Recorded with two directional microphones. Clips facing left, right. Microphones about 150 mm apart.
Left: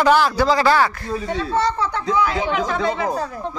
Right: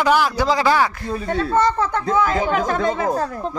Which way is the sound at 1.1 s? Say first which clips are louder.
Right 4 dB; 50° right (ahead or behind).